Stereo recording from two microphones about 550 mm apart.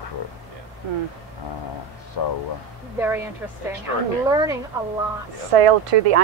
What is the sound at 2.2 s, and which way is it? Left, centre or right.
Speech, left.